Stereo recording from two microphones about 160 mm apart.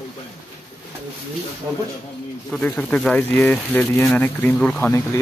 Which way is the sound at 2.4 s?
5° left (ahead or behind).